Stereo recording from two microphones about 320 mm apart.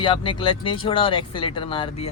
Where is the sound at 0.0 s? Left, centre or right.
Centre.